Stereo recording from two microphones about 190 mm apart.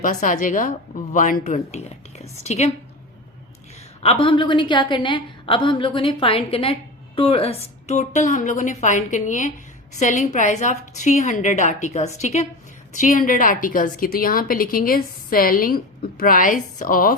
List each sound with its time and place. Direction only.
0.0 s a woman's voice: 40° left (ahead or behind)
3.8 s a woman's voice: 30° left (ahead or behind)